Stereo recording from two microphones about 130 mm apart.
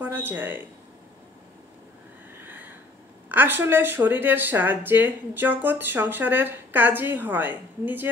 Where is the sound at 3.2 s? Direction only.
15° right (ahead or behind).